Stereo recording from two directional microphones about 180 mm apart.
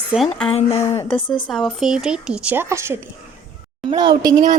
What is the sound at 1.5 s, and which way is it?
A woman's voice, centre (ahead or behind).